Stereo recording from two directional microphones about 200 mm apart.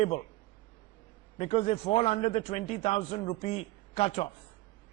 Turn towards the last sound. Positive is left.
turn(degrees=30)  # may be behind; listen again after turning